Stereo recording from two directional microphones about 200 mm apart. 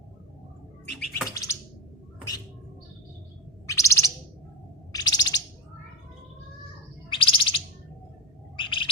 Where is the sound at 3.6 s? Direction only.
15° left (ahead or behind).